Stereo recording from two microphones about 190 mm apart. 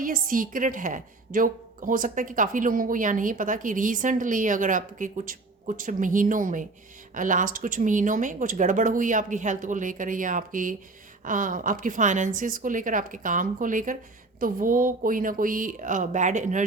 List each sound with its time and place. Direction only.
0.0 s a woman's voice: 45° right (ahead or behind)